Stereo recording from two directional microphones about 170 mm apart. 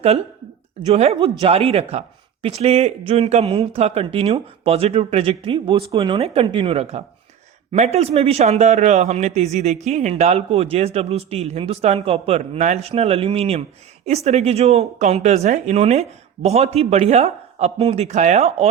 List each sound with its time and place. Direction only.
0.8 s a man's voice: 35° right (ahead or behind)